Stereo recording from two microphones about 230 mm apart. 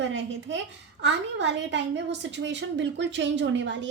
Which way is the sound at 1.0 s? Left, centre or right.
Right.